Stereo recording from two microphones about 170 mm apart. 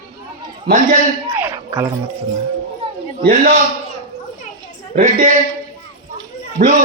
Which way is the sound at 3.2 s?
55° right (ahead or behind).